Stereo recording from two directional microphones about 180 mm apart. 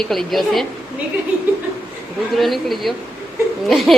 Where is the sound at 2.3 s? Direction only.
Centre (ahead or behind).